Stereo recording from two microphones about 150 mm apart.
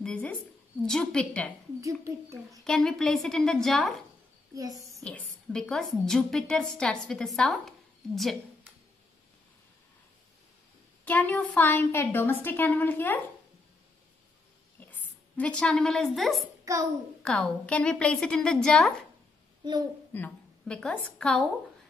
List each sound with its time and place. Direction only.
0.0 s a woman's voice: 10° left (ahead or behind)
1.8 s a child's voice: 20° right (ahead or behind)
2.6 s a woman's voice: 5° left (ahead or behind)
4.9 s a woman's voice: 5° left (ahead or behind)
11.1 s a woman's voice: 10° left (ahead or behind)
15.3 s a woman's voice: 5° left (ahead or behind)
16.7 s a child's voice: 20° right (ahead or behind)
17.2 s a woman's voice: 5° left (ahead or behind)
19.6 s a child's voice: 25° right (ahead or behind)
20.1 s a woman's voice: 10° left (ahead or behind)